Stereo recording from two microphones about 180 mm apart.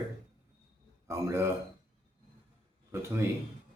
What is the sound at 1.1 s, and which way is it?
Speech, 15° right (ahead or behind).